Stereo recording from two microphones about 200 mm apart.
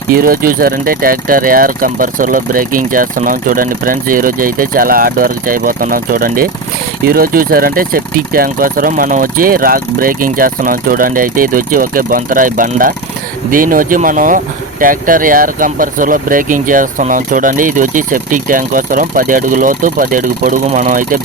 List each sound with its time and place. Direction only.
0.1 s speech: 45° right (ahead or behind)